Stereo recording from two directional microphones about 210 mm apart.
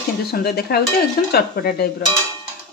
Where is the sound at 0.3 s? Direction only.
45° left (ahead or behind).